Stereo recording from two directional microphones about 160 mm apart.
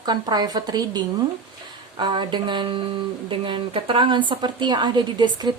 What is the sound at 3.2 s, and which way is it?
Speech, 35° right (ahead or behind).